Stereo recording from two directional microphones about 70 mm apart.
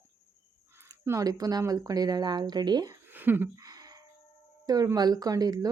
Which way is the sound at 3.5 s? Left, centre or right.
Right.